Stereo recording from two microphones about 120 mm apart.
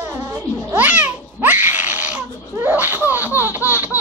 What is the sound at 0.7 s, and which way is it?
A child's voice, 15° right (ahead or behind).